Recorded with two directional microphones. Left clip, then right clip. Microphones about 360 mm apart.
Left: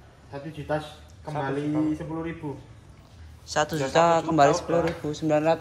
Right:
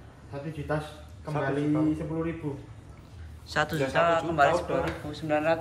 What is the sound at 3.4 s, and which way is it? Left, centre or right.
A man's voice, centre.